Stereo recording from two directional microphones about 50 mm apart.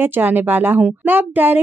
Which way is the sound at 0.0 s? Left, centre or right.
Right.